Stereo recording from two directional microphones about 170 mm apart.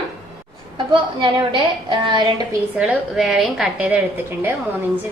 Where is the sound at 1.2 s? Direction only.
30° right (ahead or behind).